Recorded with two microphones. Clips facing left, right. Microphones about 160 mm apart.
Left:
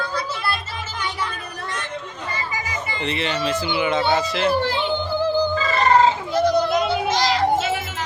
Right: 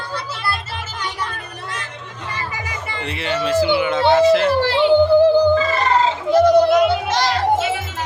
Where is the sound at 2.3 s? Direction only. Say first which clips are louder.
Even; 65° right (ahead or behind).